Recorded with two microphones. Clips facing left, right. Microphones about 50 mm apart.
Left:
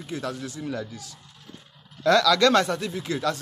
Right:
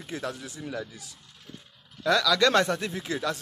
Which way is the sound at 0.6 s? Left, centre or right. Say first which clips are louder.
Left 3 dB; centre.